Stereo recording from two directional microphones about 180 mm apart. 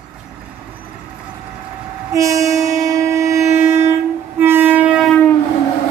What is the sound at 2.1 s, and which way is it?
Train, 20° right (ahead or behind).